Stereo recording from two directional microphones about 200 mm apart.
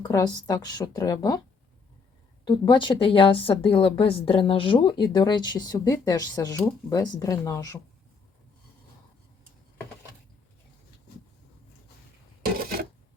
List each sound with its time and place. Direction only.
0.0 s a woman's voice: 15° left (ahead or behind)
2.4 s a woman's voice: 25° left (ahead or behind)
12.5 s filing: 50° right (ahead or behind)